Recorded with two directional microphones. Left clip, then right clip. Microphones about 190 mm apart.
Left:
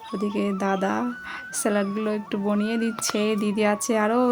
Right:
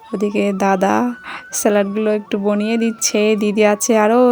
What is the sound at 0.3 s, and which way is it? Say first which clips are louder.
Speech: right 10 dB; 40° right (ahead or behind).